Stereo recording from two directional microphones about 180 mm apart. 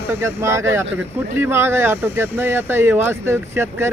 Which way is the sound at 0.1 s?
15° right (ahead or behind).